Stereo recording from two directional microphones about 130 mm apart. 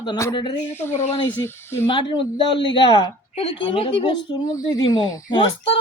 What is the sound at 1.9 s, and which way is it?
A woman's voice, 40° left (ahead or behind).